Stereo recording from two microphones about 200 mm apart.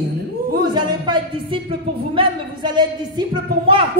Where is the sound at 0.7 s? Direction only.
20° right (ahead or behind).